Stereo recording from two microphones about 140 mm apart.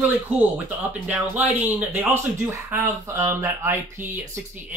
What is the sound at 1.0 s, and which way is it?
Speech, 10° right (ahead or behind).